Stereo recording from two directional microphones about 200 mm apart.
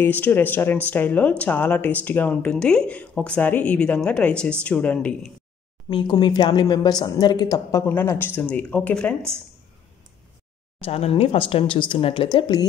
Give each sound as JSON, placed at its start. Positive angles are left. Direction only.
{"t": 0.0, "sound": "speech", "side_deg": 10}
{"t": 5.9, "sound": "speech", "side_deg": 20}
{"t": 10.8, "sound": "speech", "side_deg": 30}